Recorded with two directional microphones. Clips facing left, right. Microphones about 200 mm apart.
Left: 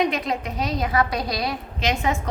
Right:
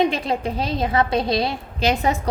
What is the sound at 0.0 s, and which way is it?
A woman's voice, 30° right (ahead or behind).